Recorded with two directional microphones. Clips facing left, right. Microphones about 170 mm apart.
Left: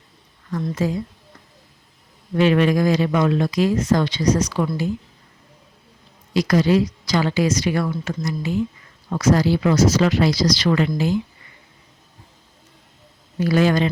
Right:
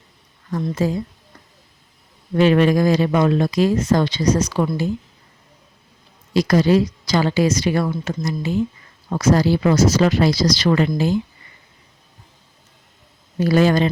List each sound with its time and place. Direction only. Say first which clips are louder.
0.5 s speech: right 2 dB; 35° right (ahead or behind)
2.3 s speech: right 2 dB; 35° right (ahead or behind)
6.3 s speech: right 2 dB; 35° right (ahead or behind)
13.4 s speech: right 2 dB; 35° right (ahead or behind)